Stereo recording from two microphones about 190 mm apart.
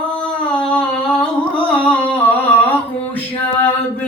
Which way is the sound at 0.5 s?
5° left (ahead or behind).